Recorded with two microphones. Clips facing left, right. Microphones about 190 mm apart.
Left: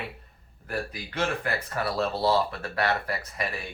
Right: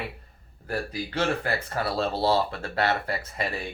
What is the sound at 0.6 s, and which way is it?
Speech, 30° right (ahead or behind).